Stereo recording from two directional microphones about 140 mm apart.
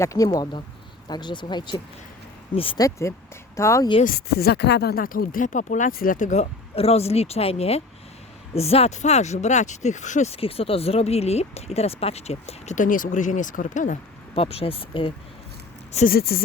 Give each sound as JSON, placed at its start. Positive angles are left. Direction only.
{"t": 0.0, "sound": "speech", "side_deg": 25}
{"t": 2.7, "sound": "speech", "side_deg": 20}
{"t": 4.0, "sound": "speech", "side_deg": 90}
{"t": 14.3, "sound": "speech", "side_deg": 45}
{"t": 16.0, "sound": "speech", "side_deg": 90}